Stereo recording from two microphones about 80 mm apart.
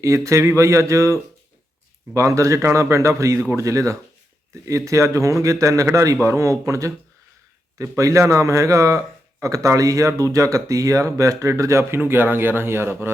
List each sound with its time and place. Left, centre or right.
0.0 s speech: right